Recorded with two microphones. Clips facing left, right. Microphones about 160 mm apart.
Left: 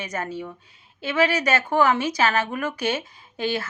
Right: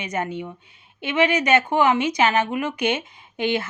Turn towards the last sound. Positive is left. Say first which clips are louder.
# right 3 dB
turn(degrees=-20)  # may be behind; listen again after turning